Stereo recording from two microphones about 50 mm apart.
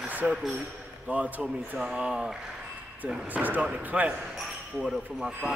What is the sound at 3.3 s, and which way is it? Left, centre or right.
Speech, right.